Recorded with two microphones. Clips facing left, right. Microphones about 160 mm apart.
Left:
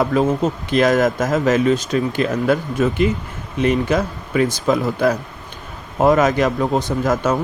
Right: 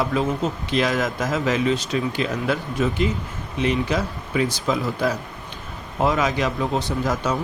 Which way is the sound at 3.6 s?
50° left (ahead or behind).